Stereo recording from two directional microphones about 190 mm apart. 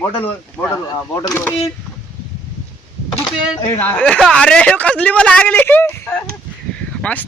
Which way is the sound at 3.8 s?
5° left (ahead or behind).